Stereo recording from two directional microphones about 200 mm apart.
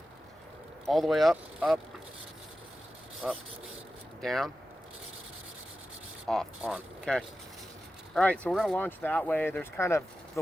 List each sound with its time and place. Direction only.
0.9 s speech: centre (ahead or behind)
3.2 s speech: 5° right (ahead or behind)
6.2 s speech: centre (ahead or behind)